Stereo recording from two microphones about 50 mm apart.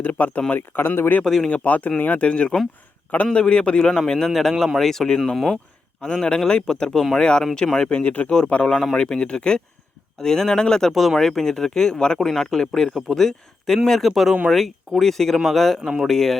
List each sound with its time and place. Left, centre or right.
0.0 s speech: left
0.5 s speech: left
1.2 s speech: centre
1.5 s speech: left
3.9 s speech: centre
6.0 s speech: centre
10.2 s speech: centre
10.9 s speech: centre